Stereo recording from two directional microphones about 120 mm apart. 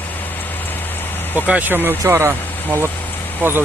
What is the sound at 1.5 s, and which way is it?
Speech, 15° right (ahead or behind).